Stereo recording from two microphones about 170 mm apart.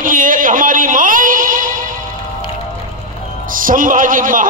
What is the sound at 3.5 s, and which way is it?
Speech, 55° right (ahead or behind).